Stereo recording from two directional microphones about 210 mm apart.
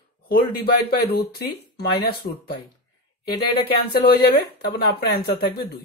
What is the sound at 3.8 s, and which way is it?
Speech, 50° left (ahead or behind).